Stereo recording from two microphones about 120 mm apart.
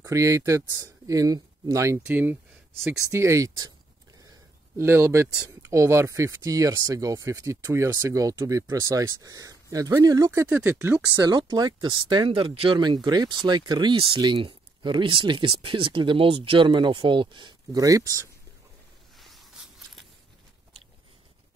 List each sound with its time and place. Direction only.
0.0 s speech: 25° right (ahead or behind)
4.7 s speech: 20° right (ahead or behind)
11.1 s speech: 35° right (ahead or behind); by 12.7 s 50° right (ahead or behind)
12.7 s speech: 35° right (ahead or behind)
19.1 s a sound: centre (ahead or behind)